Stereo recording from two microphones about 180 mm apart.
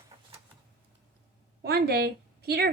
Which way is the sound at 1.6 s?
60° right (ahead or behind).